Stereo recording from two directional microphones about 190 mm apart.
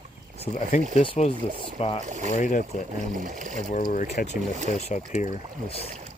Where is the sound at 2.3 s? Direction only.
40° left (ahead or behind).